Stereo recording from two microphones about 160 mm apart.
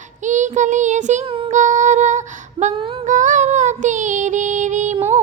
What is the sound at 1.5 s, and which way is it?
Female singing, 50° right (ahead or behind).